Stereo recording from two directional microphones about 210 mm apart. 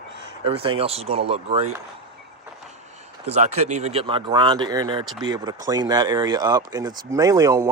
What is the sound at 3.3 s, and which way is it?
Speech, 30° right (ahead or behind).